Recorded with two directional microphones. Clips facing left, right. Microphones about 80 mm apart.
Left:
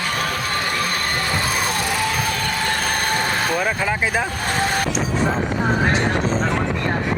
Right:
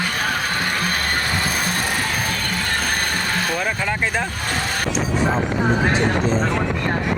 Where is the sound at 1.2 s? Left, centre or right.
Right.